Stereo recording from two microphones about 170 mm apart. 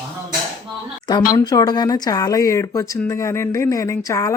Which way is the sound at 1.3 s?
20° left (ahead or behind).